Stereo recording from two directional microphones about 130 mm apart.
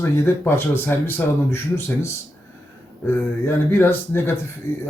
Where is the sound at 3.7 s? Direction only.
15° left (ahead or behind).